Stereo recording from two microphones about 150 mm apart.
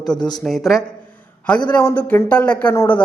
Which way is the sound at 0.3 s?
Centre (ahead or behind).